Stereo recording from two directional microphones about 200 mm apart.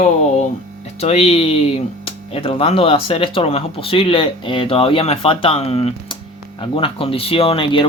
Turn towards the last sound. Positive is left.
turn(degrees=25)  # may be behind; listen again after turning